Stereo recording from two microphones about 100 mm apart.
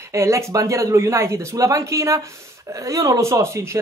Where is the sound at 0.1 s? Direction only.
30° right (ahead or behind).